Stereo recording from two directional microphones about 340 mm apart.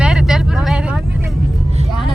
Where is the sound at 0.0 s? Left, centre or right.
Centre.